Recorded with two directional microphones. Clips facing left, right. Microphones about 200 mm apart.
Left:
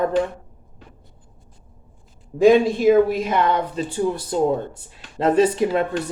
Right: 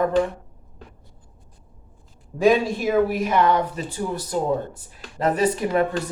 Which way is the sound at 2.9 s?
20° left (ahead or behind).